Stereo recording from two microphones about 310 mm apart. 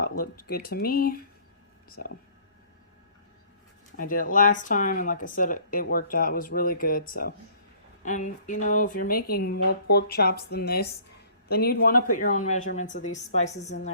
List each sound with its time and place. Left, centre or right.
0.0 s speech: left
3.9 s a woman's voice: left